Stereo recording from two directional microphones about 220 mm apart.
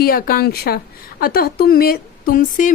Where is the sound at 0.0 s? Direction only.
40° left (ahead or behind).